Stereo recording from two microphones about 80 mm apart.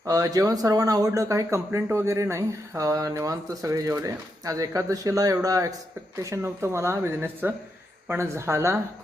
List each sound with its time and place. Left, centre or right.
0.0 s speech: right